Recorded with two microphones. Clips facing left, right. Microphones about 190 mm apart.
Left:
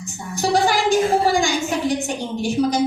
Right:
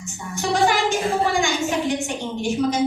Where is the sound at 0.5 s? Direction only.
35° left (ahead or behind).